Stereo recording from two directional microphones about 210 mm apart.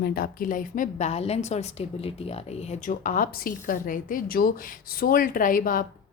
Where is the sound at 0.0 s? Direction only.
45° left (ahead or behind).